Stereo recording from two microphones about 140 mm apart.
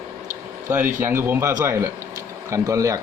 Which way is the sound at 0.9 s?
15° right (ahead or behind).